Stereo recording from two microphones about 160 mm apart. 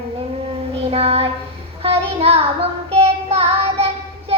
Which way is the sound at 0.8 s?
40° right (ahead or behind).